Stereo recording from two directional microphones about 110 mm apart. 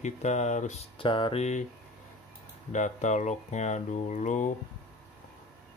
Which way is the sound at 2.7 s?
90° left.